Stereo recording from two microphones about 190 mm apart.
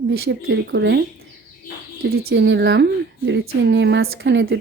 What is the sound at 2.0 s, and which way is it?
A woman's voice, 55° right (ahead or behind).